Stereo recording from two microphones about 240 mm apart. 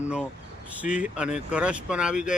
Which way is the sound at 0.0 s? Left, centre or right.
Centre.